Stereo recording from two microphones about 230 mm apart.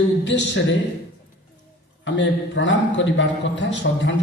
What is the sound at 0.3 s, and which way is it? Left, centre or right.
Speech, left.